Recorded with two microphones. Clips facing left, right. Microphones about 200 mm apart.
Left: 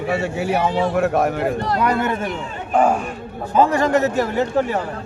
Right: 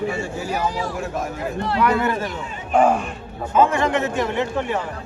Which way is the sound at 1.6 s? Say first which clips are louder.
Left 1 dB; 40° left (ahead or behind).